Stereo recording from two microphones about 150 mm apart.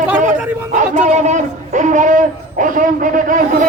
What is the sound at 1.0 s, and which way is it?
Speech, 50° right (ahead or behind).